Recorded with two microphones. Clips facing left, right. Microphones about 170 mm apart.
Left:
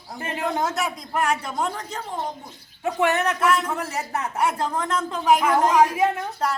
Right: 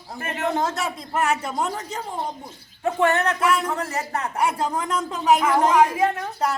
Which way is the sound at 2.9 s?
10° left (ahead or behind).